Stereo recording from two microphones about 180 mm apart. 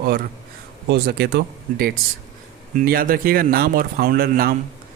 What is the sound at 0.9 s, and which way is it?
Speech, 60° right (ahead or behind).